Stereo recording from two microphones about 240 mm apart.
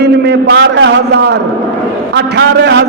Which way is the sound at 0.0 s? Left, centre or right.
Right.